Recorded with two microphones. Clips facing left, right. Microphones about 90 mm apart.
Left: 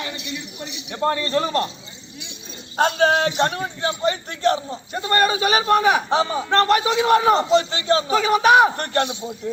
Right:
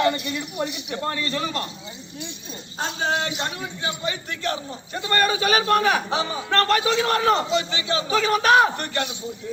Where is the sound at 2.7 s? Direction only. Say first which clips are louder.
Left 8 dB; 70° left (ahead or behind).